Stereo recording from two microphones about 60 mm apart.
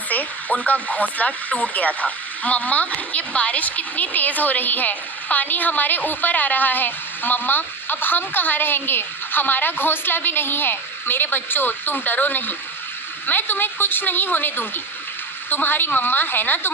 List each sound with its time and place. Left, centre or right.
0.1 s speech: left